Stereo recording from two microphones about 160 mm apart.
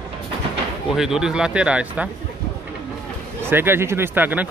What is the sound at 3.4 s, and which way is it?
Speech, 15° right (ahead or behind).